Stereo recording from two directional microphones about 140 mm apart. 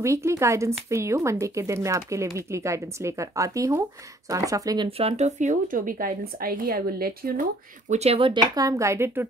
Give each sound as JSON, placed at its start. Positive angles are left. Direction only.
{"t": 0.0, "sound": "speech", "side_deg": -20}
{"t": 4.8, "sound": "a woman's voice", "side_deg": -45}
{"t": 7.9, "sound": "speech", "side_deg": -45}